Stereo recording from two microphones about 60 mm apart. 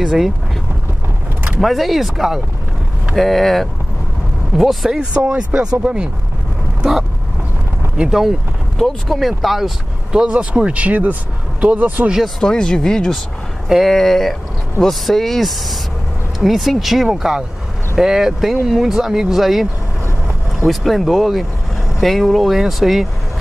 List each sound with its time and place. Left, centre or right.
0.0 s speech: centre
1.6 s speech: centre
4.6 s speech: centre
5.1 s speech: centre
8.0 s speech: centre
10.1 s speech: centre
12.4 s speech: centre